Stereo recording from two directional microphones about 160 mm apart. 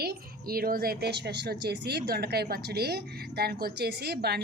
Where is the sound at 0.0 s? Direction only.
75° right (ahead or behind).